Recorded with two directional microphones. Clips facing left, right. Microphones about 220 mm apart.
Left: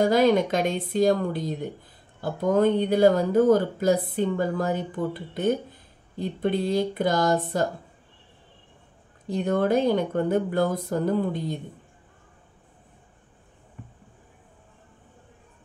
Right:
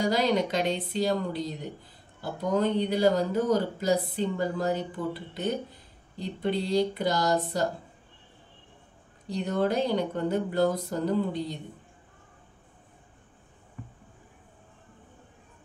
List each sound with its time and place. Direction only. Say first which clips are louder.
0.0 s speech: left 6 dB; 50° left (ahead or behind)
2.5 s speech: left 5 dB; 50° left (ahead or behind)
9.3 s speech: left 5 dB; 50° left (ahead or behind)